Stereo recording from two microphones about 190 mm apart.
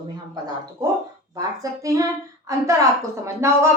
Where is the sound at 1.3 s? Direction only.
15° right (ahead or behind).